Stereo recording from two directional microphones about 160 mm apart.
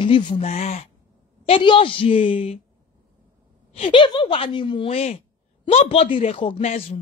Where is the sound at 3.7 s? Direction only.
35° left (ahead or behind).